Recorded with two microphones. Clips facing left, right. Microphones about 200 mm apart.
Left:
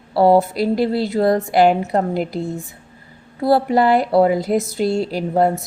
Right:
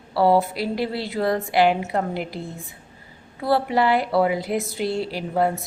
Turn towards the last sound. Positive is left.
turn(degrees=40)  # may be behind; listen again after turning